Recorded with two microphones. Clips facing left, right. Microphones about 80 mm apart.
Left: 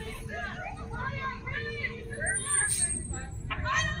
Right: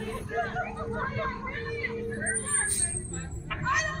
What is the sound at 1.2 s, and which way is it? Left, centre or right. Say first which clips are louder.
Vehicle: right 2 dB; centre.